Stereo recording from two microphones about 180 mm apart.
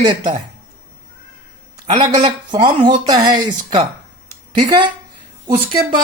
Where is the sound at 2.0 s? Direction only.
30° right (ahead or behind).